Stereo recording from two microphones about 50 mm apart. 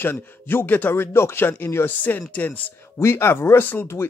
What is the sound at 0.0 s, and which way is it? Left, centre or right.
Speech, left.